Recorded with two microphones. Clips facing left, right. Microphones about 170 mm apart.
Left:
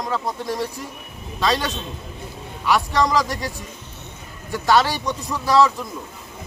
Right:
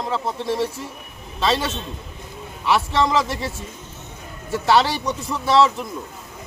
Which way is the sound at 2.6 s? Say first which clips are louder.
Even; 25° right (ahead or behind).